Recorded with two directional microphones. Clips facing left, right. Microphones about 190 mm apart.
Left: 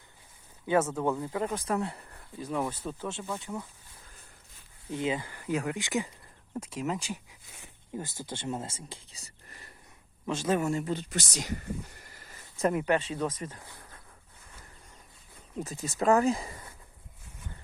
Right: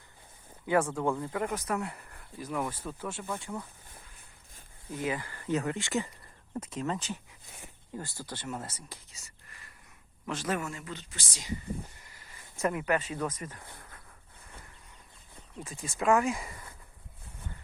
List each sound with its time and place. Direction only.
0.9 s speech: 20° left (ahead or behind)
4.9 s speech: 25° left (ahead or behind); by 7.2 s 10° left (ahead or behind)
7.9 s speech: 20° left (ahead or behind)
10.2 s speech: 10° left (ahead or behind)
10.5 s speech: 30° left (ahead or behind)
10.9 s speech: 70° left (ahead or behind)
12.0 s a sound: 45° left (ahead or behind)
12.6 s speech: 35° left (ahead or behind)
15.5 s speech: 40° left (ahead or behind)